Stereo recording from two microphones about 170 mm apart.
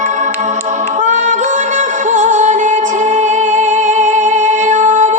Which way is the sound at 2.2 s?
45° right (ahead or behind).